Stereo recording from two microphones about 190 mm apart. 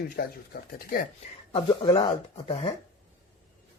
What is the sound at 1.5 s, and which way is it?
Speech, 25° left (ahead or behind).